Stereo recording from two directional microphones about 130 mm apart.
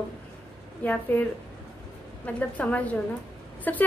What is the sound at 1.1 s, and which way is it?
A woman's voice, 15° left (ahead or behind).